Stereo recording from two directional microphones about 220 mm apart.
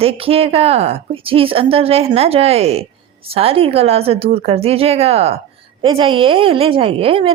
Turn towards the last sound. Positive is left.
turn(degrees=-25)  # may be behind; listen again after turning